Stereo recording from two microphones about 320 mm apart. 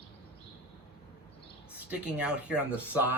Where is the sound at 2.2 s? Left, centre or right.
Centre.